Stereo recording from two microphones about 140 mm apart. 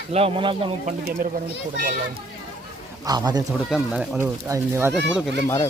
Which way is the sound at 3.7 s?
5° right (ahead or behind).